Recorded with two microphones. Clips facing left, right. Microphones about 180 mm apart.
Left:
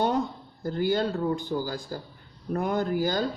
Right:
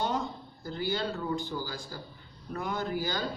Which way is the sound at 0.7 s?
50° left (ahead or behind).